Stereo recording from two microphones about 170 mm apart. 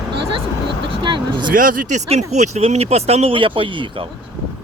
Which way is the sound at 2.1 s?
40° right (ahead or behind).